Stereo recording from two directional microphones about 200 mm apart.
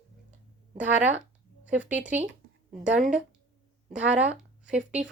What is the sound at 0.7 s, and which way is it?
A woman's voice, 10° right (ahead or behind).